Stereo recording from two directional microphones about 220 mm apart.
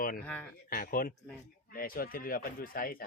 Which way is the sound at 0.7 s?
40° left (ahead or behind).